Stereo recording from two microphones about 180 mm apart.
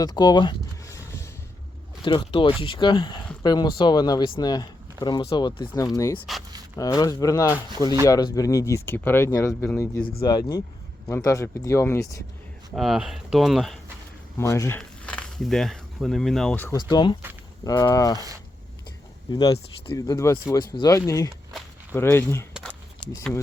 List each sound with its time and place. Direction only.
0.0 s a sound: 20° left (ahead or behind)
2.0 s speech: 25° left (ahead or behind)
12.7 s speech: centre (ahead or behind)
14.3 s speech: 15° left (ahead or behind)
14.8 s speech: 5° left (ahead or behind)
16.7 s speech: 25° left (ahead or behind)
19.3 s speech: 25° left (ahead or behind)
23.0 s speech: 25° left (ahead or behind)